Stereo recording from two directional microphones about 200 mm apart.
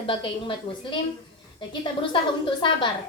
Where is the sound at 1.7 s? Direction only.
25° left (ahead or behind).